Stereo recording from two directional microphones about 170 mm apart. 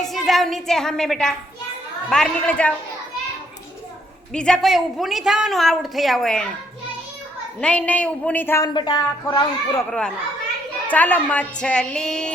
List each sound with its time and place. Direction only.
0.0 s a woman's voice: centre (ahead or behind)
4.3 s a woman's voice: 5° left (ahead or behind)
7.6 s speech: 5° left (ahead or behind)
8.7 s speech: 25° left (ahead or behind)
10.9 s a woman's voice: 10° left (ahead or behind)